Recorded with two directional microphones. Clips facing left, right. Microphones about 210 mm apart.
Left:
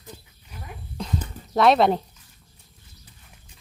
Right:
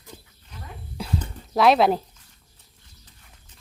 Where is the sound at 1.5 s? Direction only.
Centre (ahead or behind).